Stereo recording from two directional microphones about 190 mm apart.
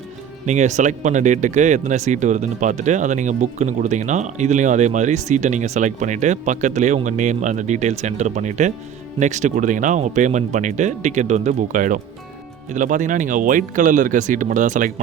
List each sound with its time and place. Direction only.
0.4 s speech: 40° right (ahead or behind)